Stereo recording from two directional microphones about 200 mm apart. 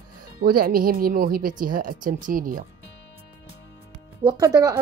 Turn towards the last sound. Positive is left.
turn(degrees=-15)  # may be behind; listen again after turning